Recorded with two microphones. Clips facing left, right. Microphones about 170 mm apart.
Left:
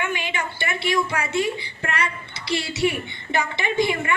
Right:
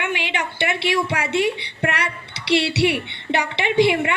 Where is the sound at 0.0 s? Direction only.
70° right (ahead or behind).